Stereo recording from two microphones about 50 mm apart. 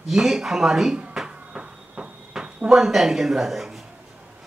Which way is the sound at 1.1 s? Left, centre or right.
Centre.